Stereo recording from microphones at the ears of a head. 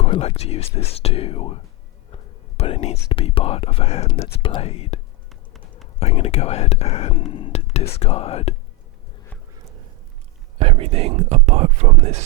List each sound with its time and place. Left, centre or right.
0.0 s speech: left
9.6 s a sound: right
10.6 s speech: right